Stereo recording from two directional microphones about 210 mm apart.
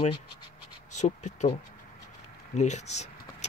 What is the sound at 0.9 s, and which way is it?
Speech, 35° left (ahead or behind).